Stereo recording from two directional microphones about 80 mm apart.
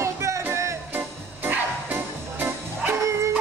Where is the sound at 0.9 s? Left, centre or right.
Right.